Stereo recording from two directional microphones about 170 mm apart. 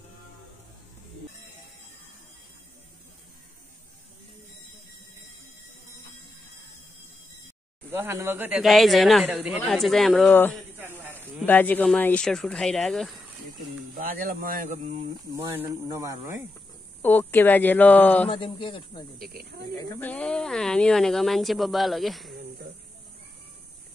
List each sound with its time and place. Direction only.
7.9 s speech: 15° right (ahead or behind); by 10.3 s centre (ahead or behind)
10.8 s snake: 15° right (ahead or behind)
11.4 s speech: 10° left (ahead or behind)
13.9 s speech: 55° right (ahead or behind)
15.5 s speech: 15° right (ahead or behind)
17.0 s speech: 10° left (ahead or behind)
18.3 s speech: 30° left (ahead or behind)
19.8 s speech: 15° left (ahead or behind)
22.3 s snake: 65° right (ahead or behind)